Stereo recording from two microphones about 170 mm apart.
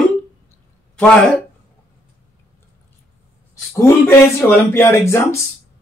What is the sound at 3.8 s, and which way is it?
Speech, 15° left (ahead or behind).